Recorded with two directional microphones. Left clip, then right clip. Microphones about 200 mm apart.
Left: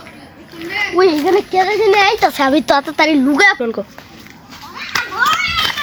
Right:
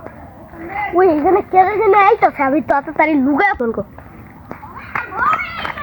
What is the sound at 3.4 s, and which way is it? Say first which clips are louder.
Speech: left 3 dB; 25° left (ahead or behind).